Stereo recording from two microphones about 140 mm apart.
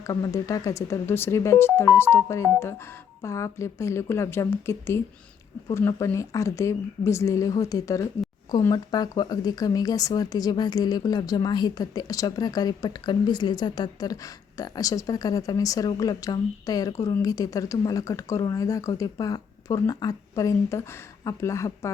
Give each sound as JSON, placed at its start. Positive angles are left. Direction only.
{"t": 0.0, "sound": "speech", "side_deg": 25}